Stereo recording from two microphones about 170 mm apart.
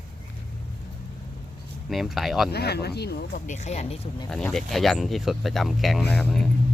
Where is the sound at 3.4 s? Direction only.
45° left (ahead or behind).